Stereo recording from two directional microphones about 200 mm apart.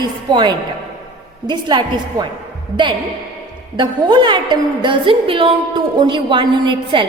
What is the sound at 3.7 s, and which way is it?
A woman's voice, 25° right (ahead or behind).